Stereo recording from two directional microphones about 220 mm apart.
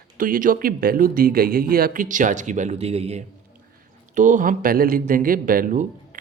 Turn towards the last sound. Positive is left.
turn(degrees=-35)  # may be behind; listen again after turning